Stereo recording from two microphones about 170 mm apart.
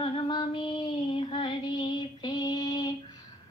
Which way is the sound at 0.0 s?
30° left (ahead or behind).